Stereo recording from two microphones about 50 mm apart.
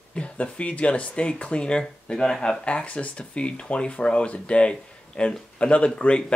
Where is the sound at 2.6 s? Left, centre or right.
Left.